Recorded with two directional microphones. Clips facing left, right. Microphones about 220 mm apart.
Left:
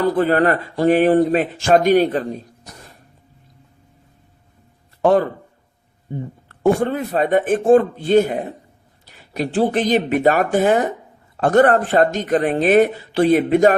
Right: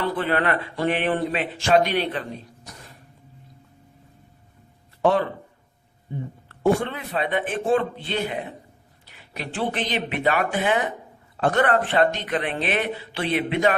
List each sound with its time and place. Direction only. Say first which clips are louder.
0.0 s speech: left 8 dB; 40° left (ahead or behind)
5.0 s speech: left 5 dB; 45° left (ahead or behind)
6.6 s speech: left 5 dB; 45° left (ahead or behind)